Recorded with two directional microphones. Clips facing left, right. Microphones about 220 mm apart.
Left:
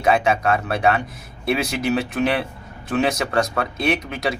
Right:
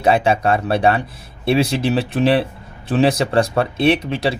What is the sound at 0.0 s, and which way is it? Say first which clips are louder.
Speech: right 3 dB; 30° right (ahead or behind).